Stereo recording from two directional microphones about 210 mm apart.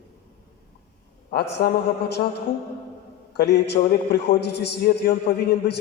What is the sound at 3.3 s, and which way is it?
A man's voice, 50° left (ahead or behind).